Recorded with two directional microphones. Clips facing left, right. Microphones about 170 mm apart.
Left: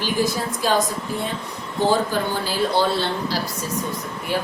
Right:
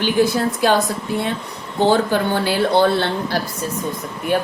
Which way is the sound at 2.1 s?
65° right (ahead or behind).